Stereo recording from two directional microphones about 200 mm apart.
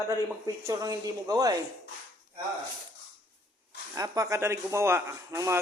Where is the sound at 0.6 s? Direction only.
15° right (ahead or behind).